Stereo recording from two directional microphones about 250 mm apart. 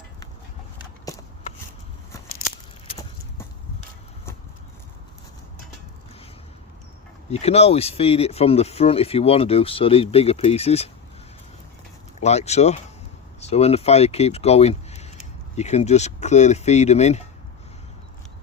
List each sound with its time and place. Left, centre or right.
7.3 s speech: left
12.2 s speech: left